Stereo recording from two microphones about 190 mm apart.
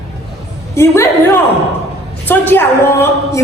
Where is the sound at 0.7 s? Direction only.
15° left (ahead or behind).